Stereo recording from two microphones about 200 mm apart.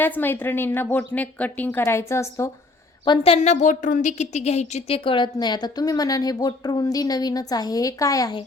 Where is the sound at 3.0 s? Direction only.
30° left (ahead or behind).